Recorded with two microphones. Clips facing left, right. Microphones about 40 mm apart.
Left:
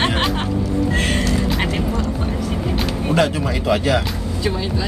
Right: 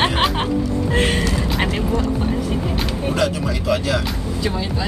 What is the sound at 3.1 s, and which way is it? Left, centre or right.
Speech, left.